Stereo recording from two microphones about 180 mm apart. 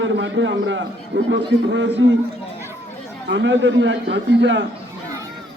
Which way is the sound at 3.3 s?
90° right.